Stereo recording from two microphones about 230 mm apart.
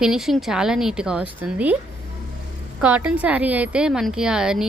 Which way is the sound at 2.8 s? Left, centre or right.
Centre.